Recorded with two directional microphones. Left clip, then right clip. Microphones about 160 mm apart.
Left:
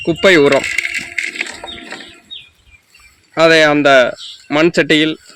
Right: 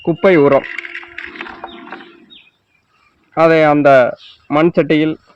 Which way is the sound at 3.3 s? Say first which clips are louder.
Left 1 dB; 55° right (ahead or behind).